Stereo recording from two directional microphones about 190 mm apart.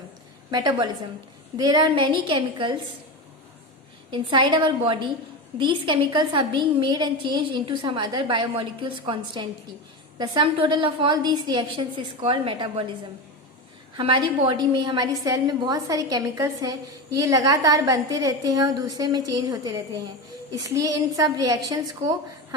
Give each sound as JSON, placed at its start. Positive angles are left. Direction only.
{"t": 0.5, "sound": "a woman's voice", "side_deg": -20}
{"t": 4.1, "sound": "a woman's voice", "side_deg": -25}
{"t": 13.9, "sound": "a woman's voice", "side_deg": -25}